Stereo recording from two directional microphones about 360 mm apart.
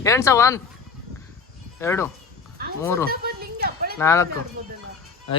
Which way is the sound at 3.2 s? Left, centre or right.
Right.